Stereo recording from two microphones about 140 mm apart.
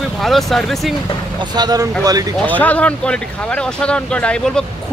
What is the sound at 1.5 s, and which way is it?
Speech, 30° right (ahead or behind).